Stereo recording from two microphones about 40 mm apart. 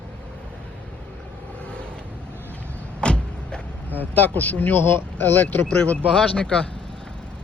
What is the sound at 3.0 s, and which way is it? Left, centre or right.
Vehicle, left.